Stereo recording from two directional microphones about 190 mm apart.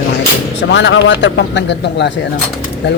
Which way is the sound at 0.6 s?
70° left (ahead or behind).